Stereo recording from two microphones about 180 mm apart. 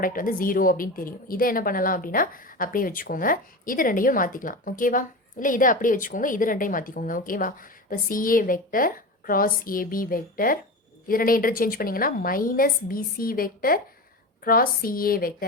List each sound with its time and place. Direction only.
0.0 s a woman's voice: 50° left (ahead or behind)